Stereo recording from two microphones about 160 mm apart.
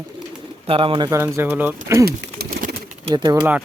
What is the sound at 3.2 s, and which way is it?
Speech, 30° right (ahead or behind).